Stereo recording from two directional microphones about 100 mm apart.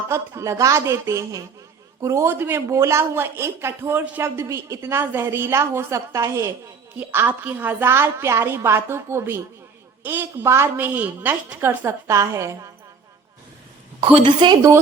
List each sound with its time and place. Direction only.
0.1 s a woman's voice: 30° right (ahead or behind)
6.9 s a woman's voice: 20° right (ahead or behind)
14.0 s a woman's voice: 65° right (ahead or behind)